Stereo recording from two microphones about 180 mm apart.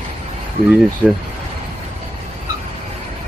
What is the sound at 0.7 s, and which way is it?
Speech, 5° right (ahead or behind).